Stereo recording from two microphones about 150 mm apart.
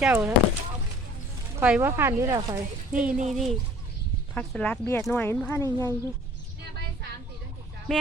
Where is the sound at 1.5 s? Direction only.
10° right (ahead or behind).